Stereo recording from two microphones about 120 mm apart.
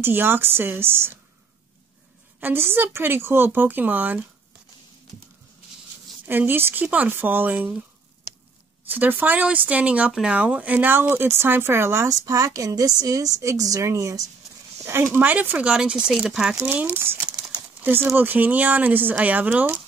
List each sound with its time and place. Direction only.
0.0 s speech: 20° right (ahead or behind)
2.4 s speech: 20° right (ahead or behind)
6.2 s speech: 15° right (ahead or behind)
8.8 s speech: 15° right (ahead or behind)